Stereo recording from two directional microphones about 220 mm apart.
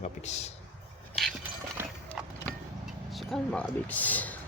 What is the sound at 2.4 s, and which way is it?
Vehicle, centre (ahead or behind).